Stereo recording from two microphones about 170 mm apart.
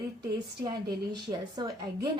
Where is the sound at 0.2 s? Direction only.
25° right (ahead or behind).